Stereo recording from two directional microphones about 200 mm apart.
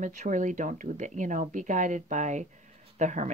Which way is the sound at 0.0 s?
40° right (ahead or behind).